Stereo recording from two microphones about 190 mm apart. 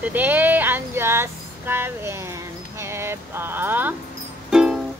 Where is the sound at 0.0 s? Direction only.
10° right (ahead or behind).